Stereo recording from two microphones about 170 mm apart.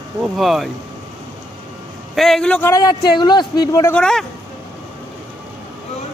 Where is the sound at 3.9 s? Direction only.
5° left (ahead or behind).